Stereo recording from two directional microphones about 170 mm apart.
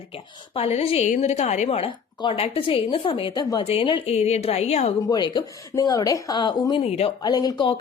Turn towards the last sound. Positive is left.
turn(degrees=30)  # may be behind; listen again after turning